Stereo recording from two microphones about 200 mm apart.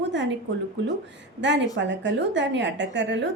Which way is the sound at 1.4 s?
60° right (ahead or behind).